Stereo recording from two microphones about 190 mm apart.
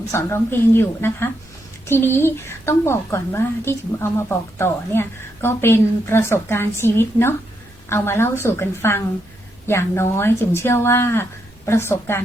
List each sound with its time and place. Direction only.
0.0 s a woman's voice: 15° left (ahead or behind)